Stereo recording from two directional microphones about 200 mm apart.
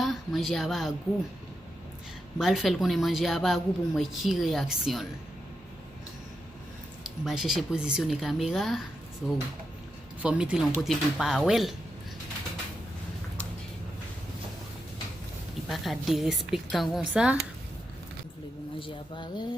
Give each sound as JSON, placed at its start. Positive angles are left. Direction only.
{"t": 0.0, "sound": "a woman's voice", "side_deg": 0}
{"t": 2.4, "sound": "speech", "side_deg": 0}
{"t": 7.3, "sound": "speech", "side_deg": 0}
{"t": 15.7, "sound": "speech", "side_deg": 0}
{"t": 18.8, "sound": "speech", "side_deg": 25}